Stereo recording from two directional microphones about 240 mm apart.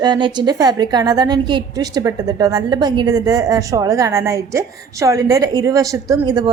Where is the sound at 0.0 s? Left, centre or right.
Centre.